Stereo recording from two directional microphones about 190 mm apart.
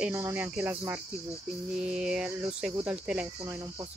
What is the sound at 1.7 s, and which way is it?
Speech, 5° right (ahead or behind).